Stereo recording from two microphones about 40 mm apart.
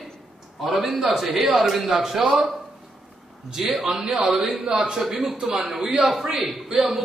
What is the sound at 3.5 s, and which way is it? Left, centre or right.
A man's voice, centre.